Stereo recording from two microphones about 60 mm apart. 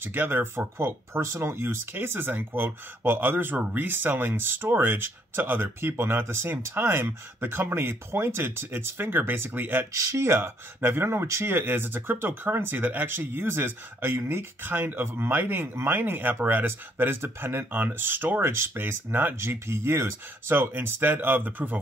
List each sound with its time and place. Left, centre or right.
0.0 s speech: right
9.9 s speech: right
18.5 s speech: right